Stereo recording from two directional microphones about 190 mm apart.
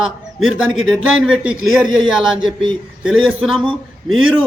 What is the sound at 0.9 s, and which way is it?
Speech, centre (ahead or behind).